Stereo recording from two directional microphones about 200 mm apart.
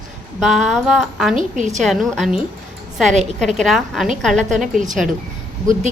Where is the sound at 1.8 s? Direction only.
Centre (ahead or behind).